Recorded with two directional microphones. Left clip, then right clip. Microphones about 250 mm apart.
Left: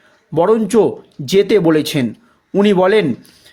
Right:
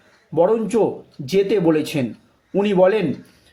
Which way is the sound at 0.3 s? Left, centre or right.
Left.